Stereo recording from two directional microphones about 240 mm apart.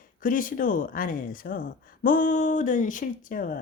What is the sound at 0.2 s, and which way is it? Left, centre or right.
Speech, left.